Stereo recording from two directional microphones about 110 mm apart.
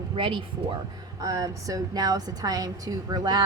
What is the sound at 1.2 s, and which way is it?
A woman's voice, 35° right (ahead or behind).